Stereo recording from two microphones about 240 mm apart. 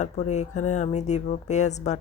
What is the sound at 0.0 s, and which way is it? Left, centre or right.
Speech, left.